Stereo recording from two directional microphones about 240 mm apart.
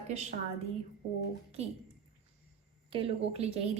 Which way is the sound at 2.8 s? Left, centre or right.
Right.